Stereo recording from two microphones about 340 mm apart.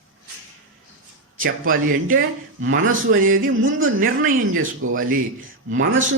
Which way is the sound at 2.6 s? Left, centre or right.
Right.